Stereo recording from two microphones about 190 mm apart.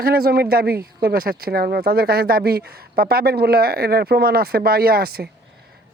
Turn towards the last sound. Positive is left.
turn(degrees=-55)  # may be behind; listen again after turning